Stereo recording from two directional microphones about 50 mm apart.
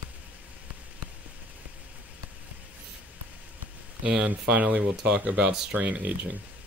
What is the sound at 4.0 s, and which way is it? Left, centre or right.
Speech, right.